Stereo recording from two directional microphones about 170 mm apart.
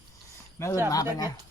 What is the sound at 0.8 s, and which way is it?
Speech, 20° left (ahead or behind).